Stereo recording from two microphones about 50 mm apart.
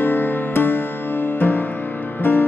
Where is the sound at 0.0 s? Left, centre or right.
Left.